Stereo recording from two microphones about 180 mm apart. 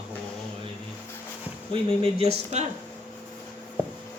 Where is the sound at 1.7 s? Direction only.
30° right (ahead or behind).